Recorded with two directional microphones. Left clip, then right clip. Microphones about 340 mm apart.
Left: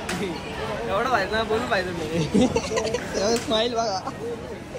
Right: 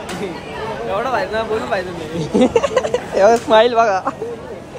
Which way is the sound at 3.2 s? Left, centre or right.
Centre.